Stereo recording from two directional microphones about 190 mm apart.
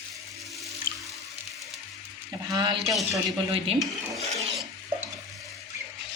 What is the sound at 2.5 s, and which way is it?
Speech, 25° right (ahead or behind).